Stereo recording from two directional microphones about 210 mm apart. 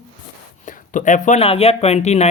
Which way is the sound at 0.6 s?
35° left (ahead or behind).